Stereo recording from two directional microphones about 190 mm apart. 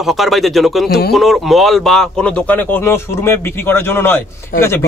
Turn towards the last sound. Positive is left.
turn(degrees=50)  # may be behind; listen again after turning